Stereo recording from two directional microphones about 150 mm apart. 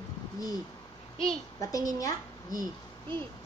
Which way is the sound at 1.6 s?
25° left (ahead or behind).